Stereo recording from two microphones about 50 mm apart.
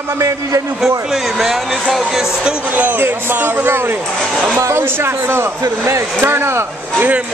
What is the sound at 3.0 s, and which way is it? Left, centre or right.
Speech, right.